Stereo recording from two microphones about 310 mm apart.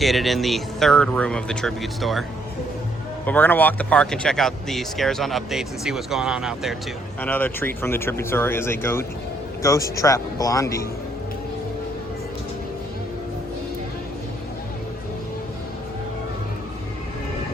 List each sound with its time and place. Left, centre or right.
0.0 s speech: centre
3.2 s speech: centre